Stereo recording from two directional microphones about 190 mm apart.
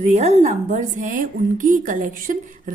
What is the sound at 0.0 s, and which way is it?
A woman's voice, 40° right (ahead or behind).